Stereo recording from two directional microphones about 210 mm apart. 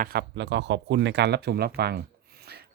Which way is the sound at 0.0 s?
50° right (ahead or behind).